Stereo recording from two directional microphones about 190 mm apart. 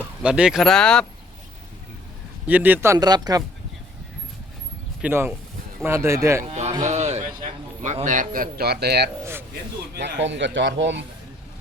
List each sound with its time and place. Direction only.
0.2 s speech: 5° right (ahead or behind)
2.5 s speech: 10° right (ahead or behind)
5.0 s speech: 10° right (ahead or behind)
6.5 s livestock: 35° right (ahead or behind)
6.8 s a sound: 35° right (ahead or behind)
7.8 s a man's voice: 40° right (ahead or behind); by 11.0 s 70° right (ahead or behind)